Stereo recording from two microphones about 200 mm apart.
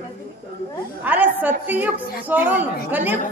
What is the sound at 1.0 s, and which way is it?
A woman's voice, 10° right (ahead or behind).